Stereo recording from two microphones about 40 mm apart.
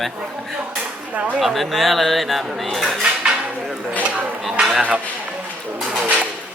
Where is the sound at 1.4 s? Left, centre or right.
Centre.